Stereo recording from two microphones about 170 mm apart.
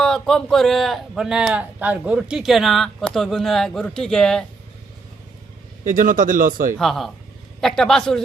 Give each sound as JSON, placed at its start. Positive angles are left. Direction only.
{"t": 0.0, "sound": "a man's voice", "side_deg": 5}
{"t": 5.8, "sound": "speech", "side_deg": -50}
{"t": 6.7, "sound": "a man's voice", "side_deg": 0}